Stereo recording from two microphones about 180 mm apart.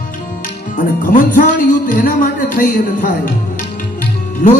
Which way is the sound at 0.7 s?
50° left (ahead or behind).